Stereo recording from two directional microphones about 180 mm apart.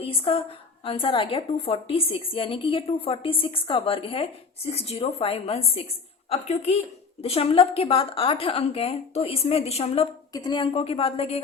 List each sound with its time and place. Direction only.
0.0 s a woman's voice: 30° left (ahead or behind)
10.3 s a woman's voice: 25° left (ahead or behind)